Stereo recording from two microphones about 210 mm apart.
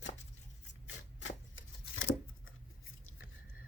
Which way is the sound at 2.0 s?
70° left (ahead or behind).